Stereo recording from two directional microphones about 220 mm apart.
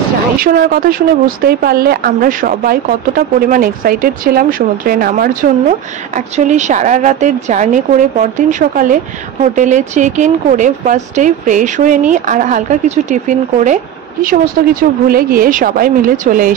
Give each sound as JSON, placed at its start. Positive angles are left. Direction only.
{"t": 0.4, "sound": "speech", "side_deg": -40}